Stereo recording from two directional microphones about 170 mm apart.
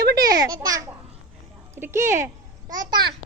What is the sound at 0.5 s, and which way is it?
Child singing, 20° right (ahead or behind).